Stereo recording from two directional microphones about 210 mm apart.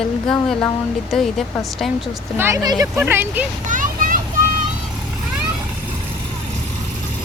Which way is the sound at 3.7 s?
40° right (ahead or behind).